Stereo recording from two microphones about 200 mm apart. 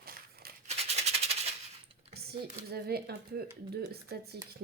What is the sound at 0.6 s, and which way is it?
Maraca, 30° right (ahead or behind).